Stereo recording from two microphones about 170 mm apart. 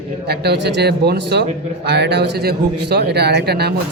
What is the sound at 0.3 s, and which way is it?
Speech, 75° right (ahead or behind).